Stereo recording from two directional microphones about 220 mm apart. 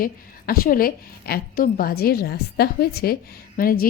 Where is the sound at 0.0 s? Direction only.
40° left (ahead or behind).